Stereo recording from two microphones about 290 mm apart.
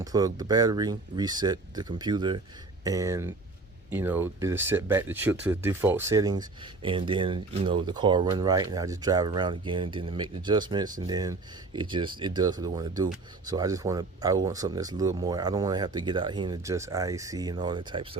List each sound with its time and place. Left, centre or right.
0.0 s speech: centre